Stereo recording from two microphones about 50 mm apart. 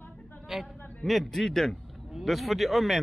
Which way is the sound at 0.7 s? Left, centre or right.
Left.